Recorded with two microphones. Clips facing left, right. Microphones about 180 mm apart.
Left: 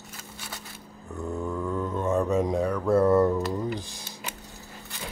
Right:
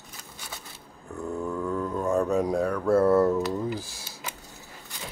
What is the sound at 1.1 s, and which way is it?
Speech, centre (ahead or behind).